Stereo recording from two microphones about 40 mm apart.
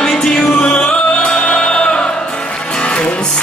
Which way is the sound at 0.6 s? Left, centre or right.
Left.